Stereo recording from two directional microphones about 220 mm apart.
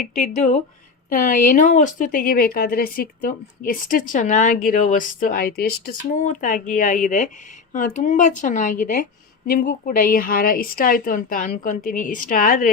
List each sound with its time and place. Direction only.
0.2 s speech: 30° left (ahead or behind)